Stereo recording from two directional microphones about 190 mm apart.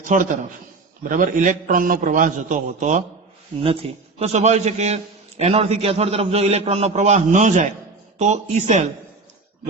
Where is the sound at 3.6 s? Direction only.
30° right (ahead or behind).